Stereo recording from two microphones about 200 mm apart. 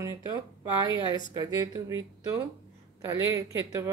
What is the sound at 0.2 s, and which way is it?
Speech, 20° right (ahead or behind).